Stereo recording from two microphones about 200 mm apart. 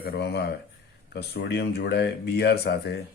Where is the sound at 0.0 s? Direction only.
55° left (ahead or behind).